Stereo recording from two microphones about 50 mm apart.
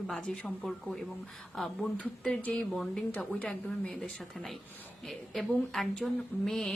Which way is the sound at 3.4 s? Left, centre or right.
Centre.